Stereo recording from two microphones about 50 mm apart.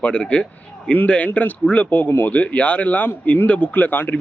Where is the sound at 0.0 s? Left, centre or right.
Left.